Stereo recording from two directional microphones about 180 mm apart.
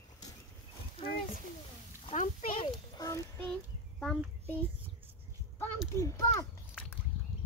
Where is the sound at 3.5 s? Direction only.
5° left (ahead or behind).